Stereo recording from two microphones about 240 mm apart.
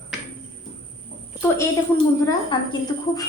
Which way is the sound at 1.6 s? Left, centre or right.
Centre.